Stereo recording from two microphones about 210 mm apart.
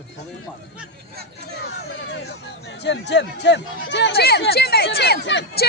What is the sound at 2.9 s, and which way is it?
Speech, 55° left (ahead or behind).